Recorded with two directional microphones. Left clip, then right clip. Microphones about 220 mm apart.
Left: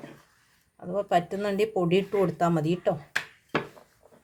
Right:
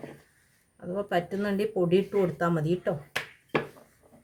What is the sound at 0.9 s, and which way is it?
Speech, 40° left (ahead or behind).